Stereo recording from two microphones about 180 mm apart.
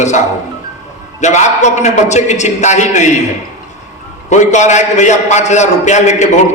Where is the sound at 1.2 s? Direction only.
40° left (ahead or behind).